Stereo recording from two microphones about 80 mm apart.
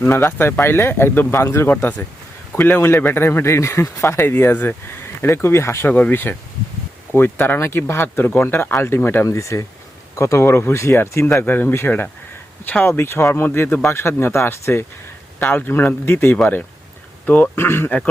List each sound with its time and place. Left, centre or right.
0.0 s speech: left
2.5 s speech: left
4.3 s speech: left
5.9 s speech: left
9.2 s speech: left
16.4 s speech: centre
17.2 s speech: left